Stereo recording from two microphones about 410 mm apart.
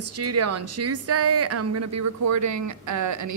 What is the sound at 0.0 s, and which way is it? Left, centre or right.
Speech, right.